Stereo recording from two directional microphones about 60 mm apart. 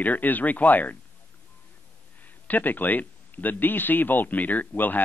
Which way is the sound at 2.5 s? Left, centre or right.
Left.